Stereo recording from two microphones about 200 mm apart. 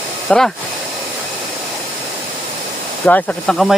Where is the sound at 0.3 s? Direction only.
5° left (ahead or behind).